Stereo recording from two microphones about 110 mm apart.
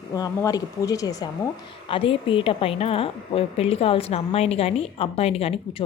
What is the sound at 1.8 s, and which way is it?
A woman's voice, 55° left (ahead or behind).